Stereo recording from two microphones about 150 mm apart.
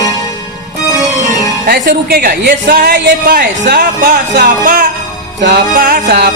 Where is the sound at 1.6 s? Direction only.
85° right; by 4.9 s 60° right (ahead or behind).